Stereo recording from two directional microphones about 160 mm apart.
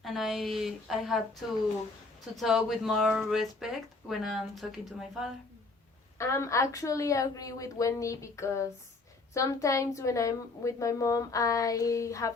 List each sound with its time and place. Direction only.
0.0 s speech: centre (ahead or behind)
6.1 s a woman's voice: 15° left (ahead or behind)